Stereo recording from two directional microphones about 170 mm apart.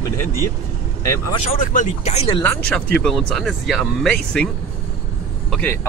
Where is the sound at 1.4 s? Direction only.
50° left (ahead or behind); by 2.4 s 35° left (ahead or behind).